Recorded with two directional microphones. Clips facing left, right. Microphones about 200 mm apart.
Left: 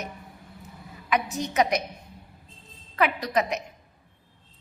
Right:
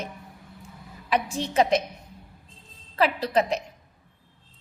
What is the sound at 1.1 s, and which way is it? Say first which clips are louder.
Speech: right 1 dB; 30° right (ahead or behind).